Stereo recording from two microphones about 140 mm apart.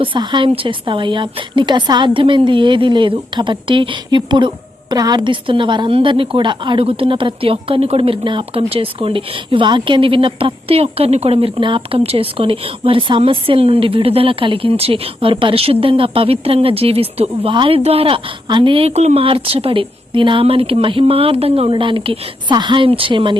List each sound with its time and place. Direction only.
0.0 s a woman's voice: 35° right (ahead or behind)